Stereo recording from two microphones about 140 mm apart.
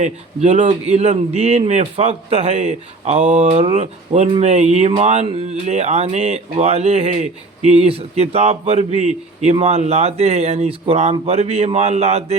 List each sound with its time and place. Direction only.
0.0 s a man's voice: 55° right (ahead or behind)